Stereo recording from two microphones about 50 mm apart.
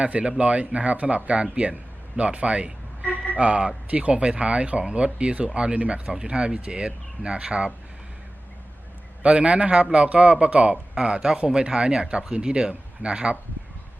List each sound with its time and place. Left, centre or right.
0.0 s speech: right
9.2 s speech: right